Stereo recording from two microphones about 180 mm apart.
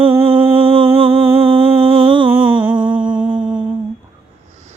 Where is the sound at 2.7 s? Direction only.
25° right (ahead or behind).